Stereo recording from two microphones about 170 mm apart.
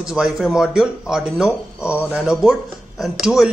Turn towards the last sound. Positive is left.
turn(degrees=0)  # may be behind; listen again after turning